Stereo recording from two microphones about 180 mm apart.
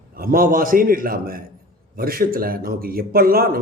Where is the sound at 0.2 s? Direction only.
55° right (ahead or behind).